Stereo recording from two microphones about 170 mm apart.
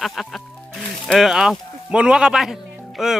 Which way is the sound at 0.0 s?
Centre (ahead or behind).